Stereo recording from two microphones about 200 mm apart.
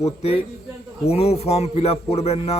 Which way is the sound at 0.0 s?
30° left (ahead or behind).